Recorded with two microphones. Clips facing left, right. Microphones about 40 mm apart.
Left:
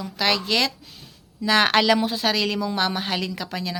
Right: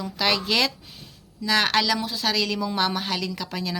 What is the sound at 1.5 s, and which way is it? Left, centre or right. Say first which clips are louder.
A woman's voice: left 4 dB; centre.